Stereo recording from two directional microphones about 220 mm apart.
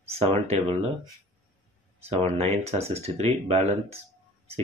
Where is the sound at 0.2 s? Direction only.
25° right (ahead or behind).